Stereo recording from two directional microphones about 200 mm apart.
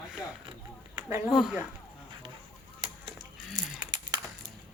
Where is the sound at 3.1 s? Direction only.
20° right (ahead or behind).